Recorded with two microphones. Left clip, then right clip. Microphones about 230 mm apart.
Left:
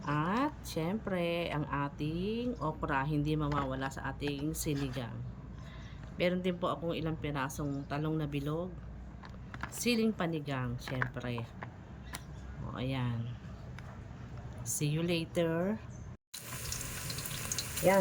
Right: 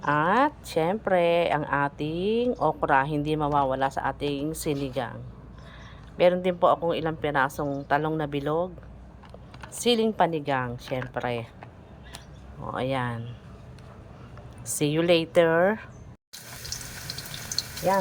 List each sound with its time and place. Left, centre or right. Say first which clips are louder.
0.2 s a woman's voice: right 11 dB; centre
6.1 s a woman's voice: right 12 dB; centre
9.7 s a woman's voice: right 10 dB; centre
12.7 s a woman's voice: right 11 dB; centre
14.7 s a woman's voice: right 13 dB; centre
15.5 s speech: right 13 dB; right